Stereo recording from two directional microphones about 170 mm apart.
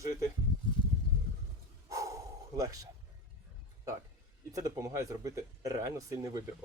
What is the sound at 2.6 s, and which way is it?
Speech, 20° right (ahead or behind).